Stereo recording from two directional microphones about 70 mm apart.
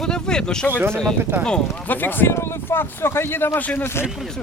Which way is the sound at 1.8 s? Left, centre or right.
Left.